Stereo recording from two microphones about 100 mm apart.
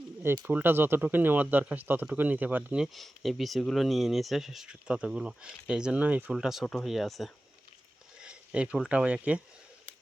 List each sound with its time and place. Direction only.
0.4 s speech: 20° right (ahead or behind)
2.8 s speech: centre (ahead or behind)
6.3 s speech: 5° right (ahead or behind)
8.2 s speech: 10° right (ahead or behind)